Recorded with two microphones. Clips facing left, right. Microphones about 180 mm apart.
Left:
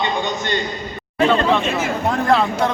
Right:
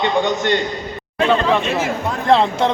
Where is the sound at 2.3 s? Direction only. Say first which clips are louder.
Right 4 dB; 20° right (ahead or behind).